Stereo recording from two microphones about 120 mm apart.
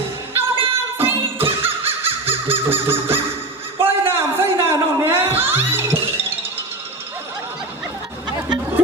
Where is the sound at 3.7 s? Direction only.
20° right (ahead or behind).